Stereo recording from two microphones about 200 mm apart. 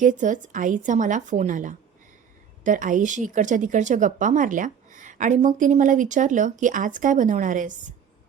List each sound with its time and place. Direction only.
0.0 s a woman's voice: 40° right (ahead or behind)